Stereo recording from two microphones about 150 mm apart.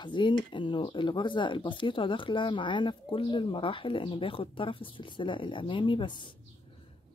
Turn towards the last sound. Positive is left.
turn(degrees=30)  # may be behind; listen again after turning